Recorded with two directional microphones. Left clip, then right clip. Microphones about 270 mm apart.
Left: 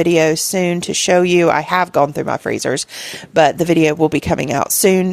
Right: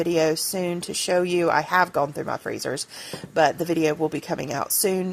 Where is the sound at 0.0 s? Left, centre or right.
Left.